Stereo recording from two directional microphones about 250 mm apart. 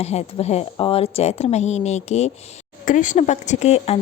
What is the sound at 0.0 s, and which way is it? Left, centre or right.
A woman's voice, left.